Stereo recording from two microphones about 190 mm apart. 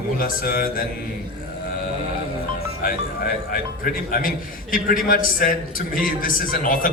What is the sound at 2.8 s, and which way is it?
Speech, 50° left (ahead or behind).